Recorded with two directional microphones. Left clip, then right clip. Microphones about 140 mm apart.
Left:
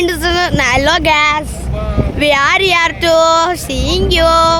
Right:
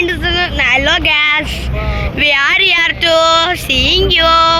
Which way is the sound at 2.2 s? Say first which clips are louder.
Even; 35° left (ahead or behind).